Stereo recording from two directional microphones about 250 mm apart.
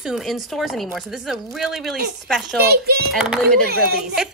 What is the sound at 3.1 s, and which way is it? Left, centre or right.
A woman's voice, centre.